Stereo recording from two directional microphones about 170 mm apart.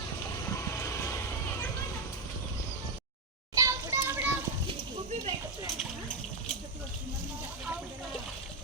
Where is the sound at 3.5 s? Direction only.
20° right (ahead or behind).